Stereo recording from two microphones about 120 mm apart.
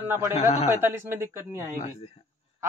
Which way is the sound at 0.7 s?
20° right (ahead or behind).